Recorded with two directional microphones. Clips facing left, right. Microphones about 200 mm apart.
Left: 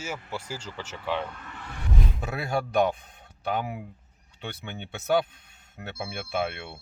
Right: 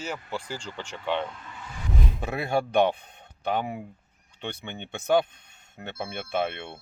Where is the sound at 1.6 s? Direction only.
65° left (ahead or behind).